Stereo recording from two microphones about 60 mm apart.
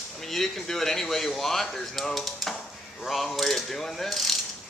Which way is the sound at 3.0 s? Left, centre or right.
Centre.